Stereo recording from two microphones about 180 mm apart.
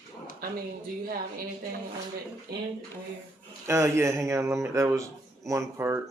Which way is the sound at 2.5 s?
60° right (ahead or behind).